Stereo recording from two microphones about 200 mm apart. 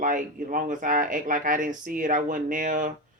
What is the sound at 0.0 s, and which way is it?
Speech, 45° right (ahead or behind).